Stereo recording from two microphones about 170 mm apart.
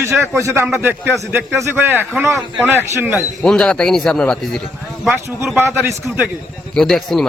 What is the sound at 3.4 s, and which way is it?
A man's voice, 5° left (ahead or behind).